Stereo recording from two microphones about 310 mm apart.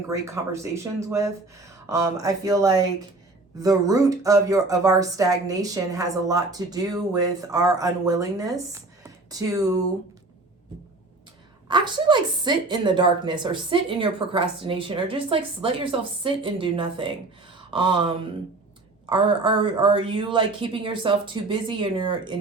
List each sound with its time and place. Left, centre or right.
0.1 s speech: centre
11.7 s speech: centre